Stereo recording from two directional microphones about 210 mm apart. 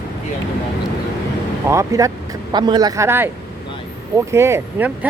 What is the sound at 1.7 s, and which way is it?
Speech, 15° right (ahead or behind).